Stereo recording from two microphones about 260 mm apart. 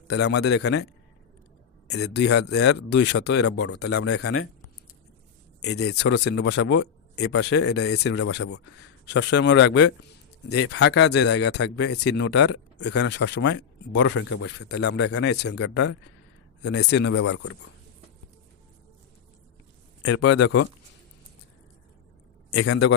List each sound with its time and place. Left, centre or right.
0.2 s speech: left
2.1 s speech: left
4.1 s speech: left
5.6 s speech: left
14.8 s speech: left
20.4 s speech: left
22.5 s speech: left